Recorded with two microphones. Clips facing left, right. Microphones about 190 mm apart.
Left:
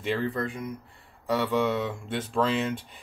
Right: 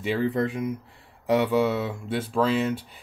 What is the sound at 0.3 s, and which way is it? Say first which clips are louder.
Speech: right 6 dB; 20° right (ahead or behind).